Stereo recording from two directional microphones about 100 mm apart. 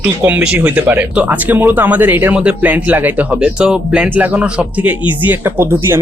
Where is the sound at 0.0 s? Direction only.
15° right (ahead or behind).